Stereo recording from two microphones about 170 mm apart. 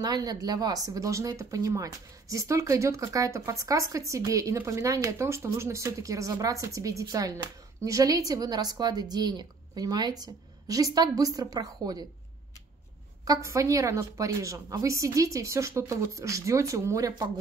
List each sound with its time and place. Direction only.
0.0 s speech: 25° right (ahead or behind)
13.2 s speech: 20° right (ahead or behind)